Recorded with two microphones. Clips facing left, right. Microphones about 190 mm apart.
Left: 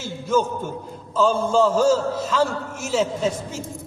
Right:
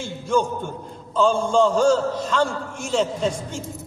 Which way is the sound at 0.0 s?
5° left (ahead or behind).